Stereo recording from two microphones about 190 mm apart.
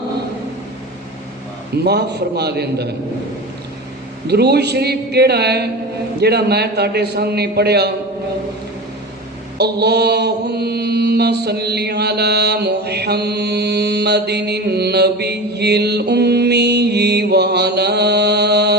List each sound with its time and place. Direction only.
1.8 s a man's voice: 60° right (ahead or behind)
4.3 s a man's voice: 60° right (ahead or behind)
9.6 s mantra: 60° right (ahead or behind)